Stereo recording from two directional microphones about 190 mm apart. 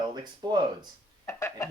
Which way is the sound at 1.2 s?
10° left (ahead or behind).